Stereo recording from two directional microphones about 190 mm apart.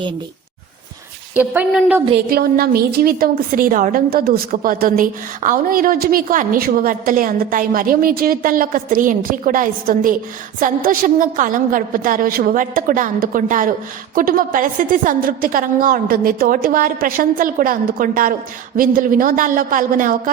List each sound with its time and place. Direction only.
1.4 s a woman's voice: 10° right (ahead or behind)
2.3 s a woman's voice: 50° right (ahead or behind)